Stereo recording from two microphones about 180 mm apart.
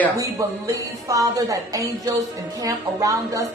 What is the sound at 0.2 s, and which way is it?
A woman's voice, 15° right (ahead or behind).